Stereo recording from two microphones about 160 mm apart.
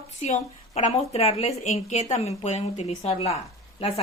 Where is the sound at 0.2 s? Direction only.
45° left (ahead or behind).